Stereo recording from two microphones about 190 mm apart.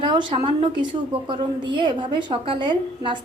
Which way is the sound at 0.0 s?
25° right (ahead or behind).